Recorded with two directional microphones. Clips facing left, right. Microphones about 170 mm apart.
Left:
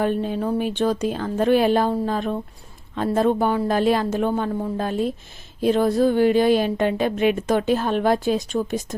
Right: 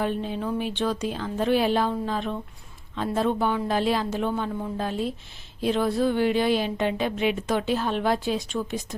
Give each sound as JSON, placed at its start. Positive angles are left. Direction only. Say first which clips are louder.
{"t": 0.0, "sound": "a woman's voice", "louder": "left 5 dB", "side_deg": 50}